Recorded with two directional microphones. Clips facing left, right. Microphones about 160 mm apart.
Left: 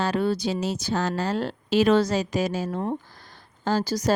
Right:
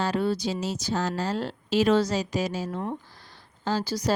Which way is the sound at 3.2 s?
50° left (ahead or behind).